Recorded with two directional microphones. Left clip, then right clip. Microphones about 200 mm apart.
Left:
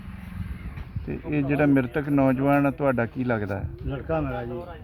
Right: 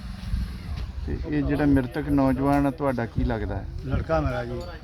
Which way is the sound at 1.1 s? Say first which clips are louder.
Left 1 dB; 40° left (ahead or behind).